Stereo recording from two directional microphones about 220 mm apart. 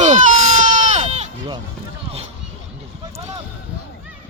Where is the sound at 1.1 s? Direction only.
30° right (ahead or behind).